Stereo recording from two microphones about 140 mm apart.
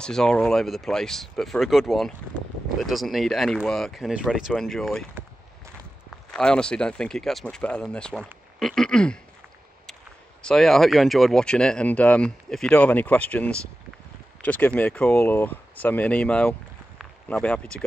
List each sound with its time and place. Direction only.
0.0 s speech: 5° left (ahead or behind)
6.0 s speech: 5° left (ahead or behind)
10.4 s speech: centre (ahead or behind)